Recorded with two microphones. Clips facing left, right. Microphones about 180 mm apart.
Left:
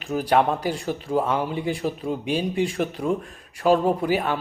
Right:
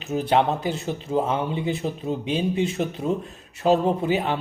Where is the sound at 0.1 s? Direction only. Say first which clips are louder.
Even; 25° right (ahead or behind).